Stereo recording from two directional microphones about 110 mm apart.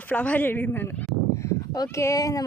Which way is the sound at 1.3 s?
25° left (ahead or behind).